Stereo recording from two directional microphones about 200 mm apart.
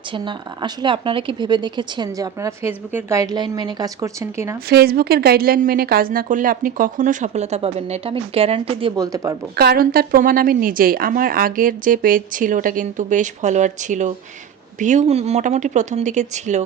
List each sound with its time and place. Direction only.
0.1 s speech: 25° right (ahead or behind)
4.7 s a woman's voice: 50° right (ahead or behind); by 8.9 s 30° right (ahead or behind)
9.0 s speech: 15° right (ahead or behind)
9.6 s a woman's voice: 50° right (ahead or behind); by 16.6 s 35° right (ahead or behind)